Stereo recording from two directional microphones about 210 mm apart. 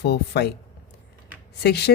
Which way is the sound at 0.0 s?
50° left (ahead or behind).